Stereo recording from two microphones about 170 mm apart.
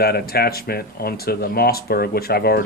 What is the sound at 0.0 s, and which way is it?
Speech, 65° left (ahead or behind).